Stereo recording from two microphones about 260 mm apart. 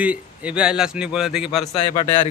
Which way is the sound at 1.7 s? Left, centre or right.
Left.